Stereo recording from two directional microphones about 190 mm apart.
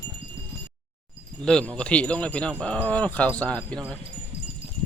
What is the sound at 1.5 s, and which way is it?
Speech, 5° left (ahead or behind).